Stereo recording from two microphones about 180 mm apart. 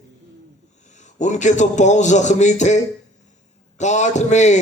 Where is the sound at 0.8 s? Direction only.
40° left (ahead or behind).